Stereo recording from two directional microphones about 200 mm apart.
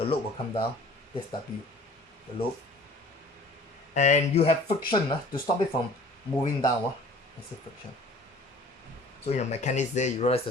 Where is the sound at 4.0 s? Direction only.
35° left (ahead or behind).